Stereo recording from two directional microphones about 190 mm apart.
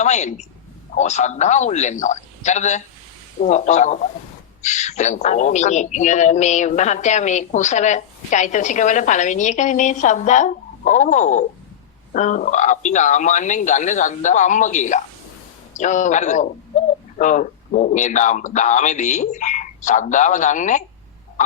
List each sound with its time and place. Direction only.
0.0 s a man's voice: 40° left (ahead or behind)